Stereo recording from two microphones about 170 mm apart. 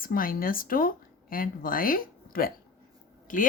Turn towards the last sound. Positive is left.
turn(degrees=50)  # may be behind; listen again after turning